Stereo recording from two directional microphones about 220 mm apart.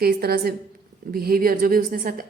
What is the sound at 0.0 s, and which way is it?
A woman's voice, 45° right (ahead or behind).